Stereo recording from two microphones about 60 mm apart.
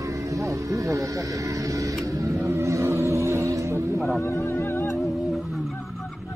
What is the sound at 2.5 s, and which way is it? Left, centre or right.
Roaring cats, right.